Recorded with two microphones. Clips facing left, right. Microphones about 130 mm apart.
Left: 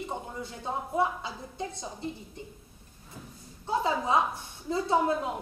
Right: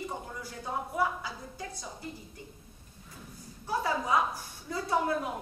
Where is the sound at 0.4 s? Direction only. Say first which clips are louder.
Even; 25° left (ahead or behind).